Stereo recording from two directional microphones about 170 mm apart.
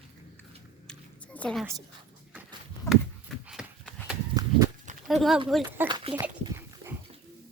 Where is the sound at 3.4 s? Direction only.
5° right (ahead or behind).